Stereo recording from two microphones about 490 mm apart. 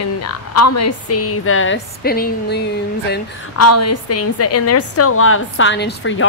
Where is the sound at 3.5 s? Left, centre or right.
Left.